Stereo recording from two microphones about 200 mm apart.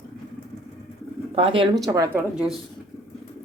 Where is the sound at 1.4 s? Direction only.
25° right (ahead or behind).